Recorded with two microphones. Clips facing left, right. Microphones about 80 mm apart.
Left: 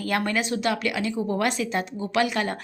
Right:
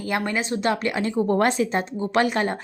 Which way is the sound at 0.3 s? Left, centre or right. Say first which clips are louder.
Right 1 dB; right.